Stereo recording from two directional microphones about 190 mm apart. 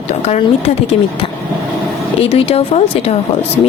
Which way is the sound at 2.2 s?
30° left (ahead or behind).